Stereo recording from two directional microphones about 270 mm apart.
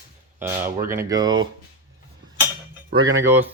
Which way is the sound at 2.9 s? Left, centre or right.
Centre.